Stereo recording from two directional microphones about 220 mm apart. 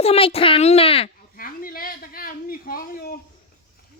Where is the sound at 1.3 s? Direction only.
40° left (ahead or behind).